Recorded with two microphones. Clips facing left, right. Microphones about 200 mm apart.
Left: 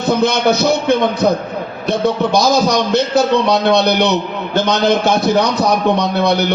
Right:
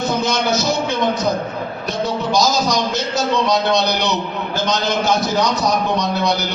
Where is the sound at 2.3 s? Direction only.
60° left (ahead or behind).